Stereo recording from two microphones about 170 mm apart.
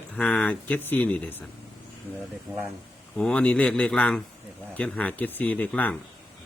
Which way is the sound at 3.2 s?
5° left (ahead or behind).